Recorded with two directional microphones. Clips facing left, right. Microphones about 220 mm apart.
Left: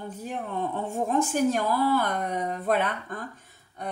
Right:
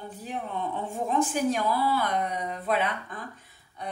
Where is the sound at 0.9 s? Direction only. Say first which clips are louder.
Left 1 dB; 45° left (ahead or behind).